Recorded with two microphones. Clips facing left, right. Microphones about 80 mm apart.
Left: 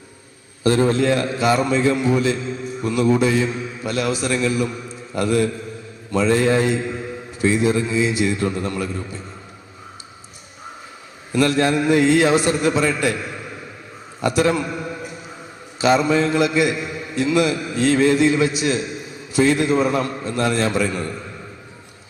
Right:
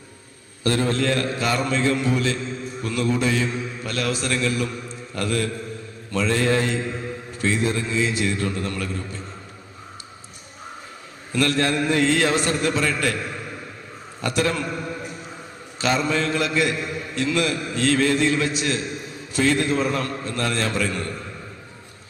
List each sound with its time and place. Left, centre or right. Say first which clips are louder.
0.6 s a man's voice: left 5 dB; centre
11.3 s a man's voice: left 4 dB; centre